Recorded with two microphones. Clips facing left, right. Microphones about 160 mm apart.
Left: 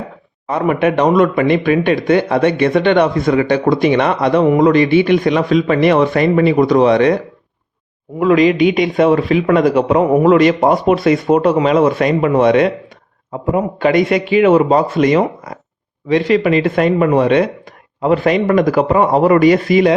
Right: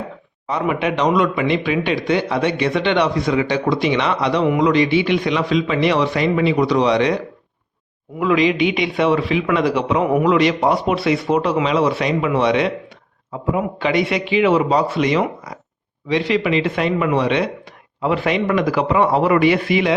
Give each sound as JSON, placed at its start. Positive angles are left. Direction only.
{"t": 0.4, "sound": "speech", "side_deg": 55}
{"t": 8.2, "sound": "speech", "side_deg": 45}